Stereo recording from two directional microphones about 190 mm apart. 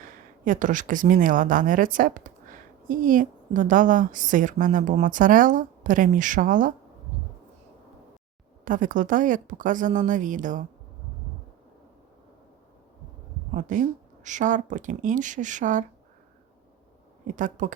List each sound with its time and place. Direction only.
0.0 s speech: 45° right (ahead or behind)
8.6 s speech: 45° right (ahead or behind)
13.5 s speech: 40° right (ahead or behind)
17.3 s speech: 40° right (ahead or behind)